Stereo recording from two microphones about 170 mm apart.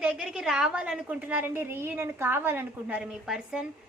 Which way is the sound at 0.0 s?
5° right (ahead or behind).